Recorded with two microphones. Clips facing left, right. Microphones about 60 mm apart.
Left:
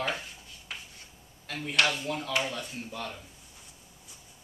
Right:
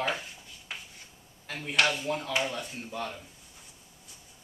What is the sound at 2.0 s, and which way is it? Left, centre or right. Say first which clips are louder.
Speech: right 1 dB; centre.